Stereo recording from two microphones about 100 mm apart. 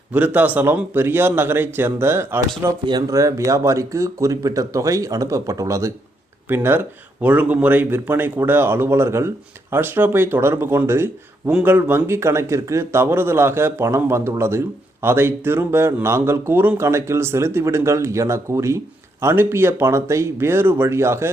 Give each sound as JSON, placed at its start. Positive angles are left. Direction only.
{"t": 0.1, "sound": "a man's voice", "side_deg": -15}